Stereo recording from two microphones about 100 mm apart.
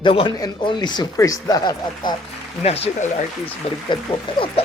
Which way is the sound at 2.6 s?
90° left.